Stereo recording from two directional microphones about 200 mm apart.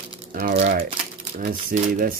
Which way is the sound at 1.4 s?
40° right (ahead or behind).